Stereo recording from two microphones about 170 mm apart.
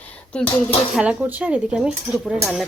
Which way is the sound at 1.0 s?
10° right (ahead or behind).